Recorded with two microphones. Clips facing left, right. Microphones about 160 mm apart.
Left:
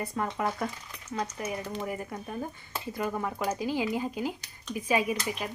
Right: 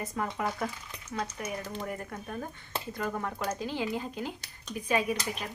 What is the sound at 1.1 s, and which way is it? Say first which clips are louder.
Stir: left 2 dB; 5° left (ahead or behind).